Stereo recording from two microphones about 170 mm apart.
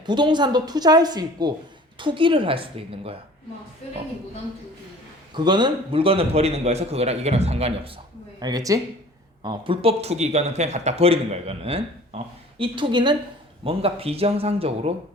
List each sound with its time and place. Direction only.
0.0 s a woman's voice: 25° right (ahead or behind)
5.3 s a man's voice: 25° right (ahead or behind)
8.4 s a woman's voice: 25° right (ahead or behind)